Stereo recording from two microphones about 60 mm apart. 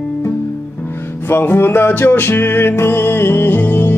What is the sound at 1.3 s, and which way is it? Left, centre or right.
Music, left.